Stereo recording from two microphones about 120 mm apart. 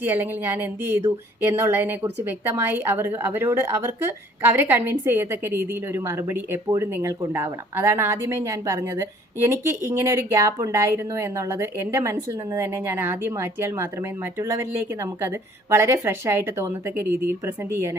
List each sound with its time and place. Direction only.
0.0 s speech: 15° right (ahead or behind)